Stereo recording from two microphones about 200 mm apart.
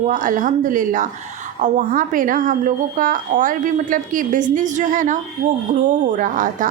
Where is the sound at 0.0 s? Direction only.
40° right (ahead or behind).